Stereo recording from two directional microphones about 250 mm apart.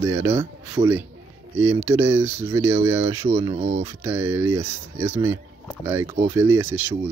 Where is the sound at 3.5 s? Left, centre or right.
Right.